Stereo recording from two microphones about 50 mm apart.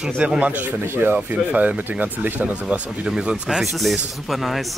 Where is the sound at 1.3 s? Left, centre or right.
Right.